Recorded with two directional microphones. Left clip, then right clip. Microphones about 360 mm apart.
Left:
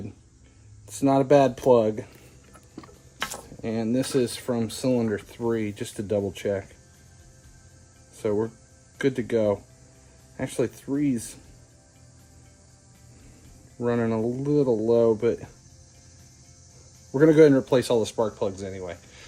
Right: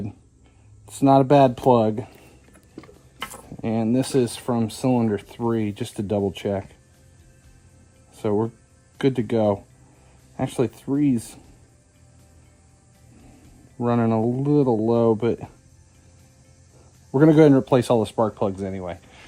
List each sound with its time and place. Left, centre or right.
1.0 s speech: centre
2.7 s a sound: centre
3.6 s speech: centre
8.2 s speech: centre
13.8 s speech: centre
17.2 s speech: centre